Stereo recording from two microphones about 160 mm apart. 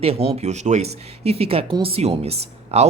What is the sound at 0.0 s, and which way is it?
Speech, 40° right (ahead or behind).